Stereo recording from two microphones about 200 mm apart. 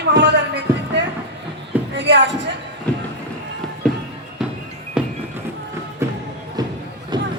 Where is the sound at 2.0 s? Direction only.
60° right (ahead or behind).